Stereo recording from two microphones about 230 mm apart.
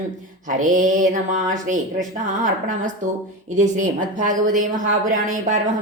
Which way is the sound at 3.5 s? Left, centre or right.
Right.